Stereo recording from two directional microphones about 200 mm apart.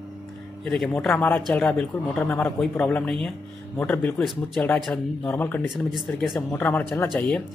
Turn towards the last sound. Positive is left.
turn(degrees=5)  # may be behind; listen again after turning